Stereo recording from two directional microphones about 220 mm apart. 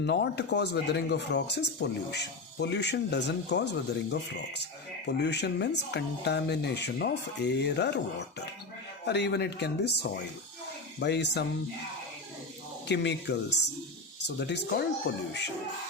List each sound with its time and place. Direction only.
0.0 s speech: 50° left (ahead or behind)
9.0 s speech: 50° left (ahead or behind)
12.9 s speech: 50° left (ahead or behind)